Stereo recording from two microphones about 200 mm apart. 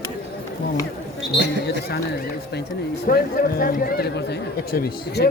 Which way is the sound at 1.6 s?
55° left (ahead or behind).